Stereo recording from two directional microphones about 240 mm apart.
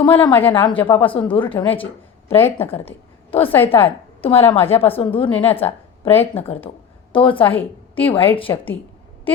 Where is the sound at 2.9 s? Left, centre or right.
Left.